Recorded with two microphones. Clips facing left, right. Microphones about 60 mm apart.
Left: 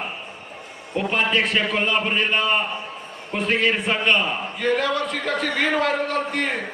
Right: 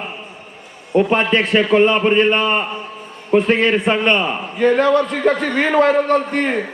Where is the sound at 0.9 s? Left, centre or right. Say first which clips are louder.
Right 6 dB; right.